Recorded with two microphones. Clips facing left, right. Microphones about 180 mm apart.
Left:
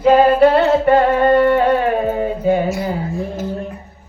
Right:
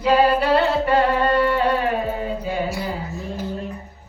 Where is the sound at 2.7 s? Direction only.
45° left (ahead or behind).